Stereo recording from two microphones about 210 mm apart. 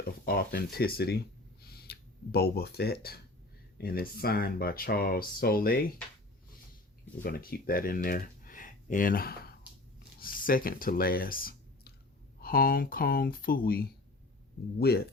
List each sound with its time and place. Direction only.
0.0 s speech: 45° left (ahead or behind)
1.6 s a sound: 50° left (ahead or behind)
3.8 s speech: 45° left (ahead or behind)
7.2 s speech: 45° left (ahead or behind)